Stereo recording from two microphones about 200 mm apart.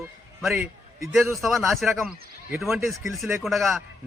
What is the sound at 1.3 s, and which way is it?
A man's voice, centre (ahead or behind).